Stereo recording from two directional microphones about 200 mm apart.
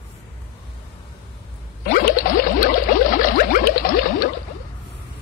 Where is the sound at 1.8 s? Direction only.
45° left (ahead or behind).